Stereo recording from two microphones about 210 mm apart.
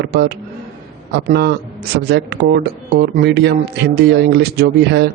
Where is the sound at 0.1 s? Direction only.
50° right (ahead or behind).